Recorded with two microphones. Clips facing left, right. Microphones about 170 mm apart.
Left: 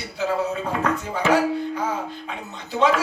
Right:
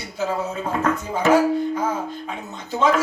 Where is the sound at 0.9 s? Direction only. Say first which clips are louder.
Right 4 dB; 45° right (ahead or behind).